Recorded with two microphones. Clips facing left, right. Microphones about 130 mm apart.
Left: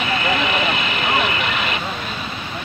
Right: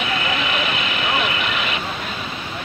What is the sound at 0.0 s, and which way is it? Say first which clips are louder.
Vehicle: left 3 dB; 5° right (ahead or behind).